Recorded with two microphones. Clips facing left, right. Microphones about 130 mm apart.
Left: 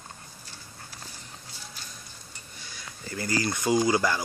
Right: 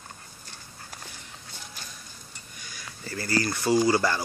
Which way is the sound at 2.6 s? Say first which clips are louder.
Even; 25° left (ahead or behind).